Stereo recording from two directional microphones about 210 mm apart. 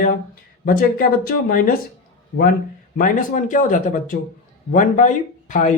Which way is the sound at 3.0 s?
40° left (ahead or behind).